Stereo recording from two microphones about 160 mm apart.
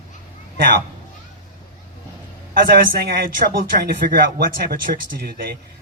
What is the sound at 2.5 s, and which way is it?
Speech, 65° right (ahead or behind).